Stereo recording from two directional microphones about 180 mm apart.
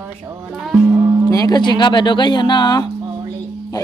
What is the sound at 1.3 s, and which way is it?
A man's voice, 20° left (ahead or behind).